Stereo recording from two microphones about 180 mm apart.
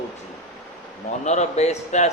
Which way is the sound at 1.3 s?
40° left (ahead or behind).